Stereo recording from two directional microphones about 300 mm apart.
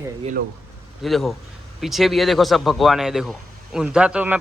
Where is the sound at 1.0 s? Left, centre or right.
Centre.